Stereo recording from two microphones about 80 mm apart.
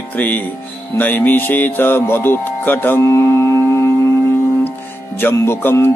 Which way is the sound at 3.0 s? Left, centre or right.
Left.